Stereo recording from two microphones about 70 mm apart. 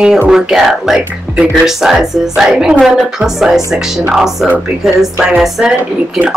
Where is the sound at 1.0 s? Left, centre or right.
Centre.